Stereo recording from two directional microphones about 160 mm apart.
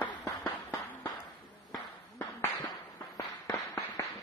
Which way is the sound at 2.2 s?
25° left (ahead or behind).